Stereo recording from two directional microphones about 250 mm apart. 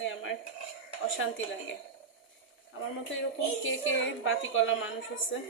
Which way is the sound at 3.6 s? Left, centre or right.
Left.